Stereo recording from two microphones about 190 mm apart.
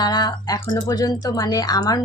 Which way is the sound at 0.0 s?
20° left (ahead or behind).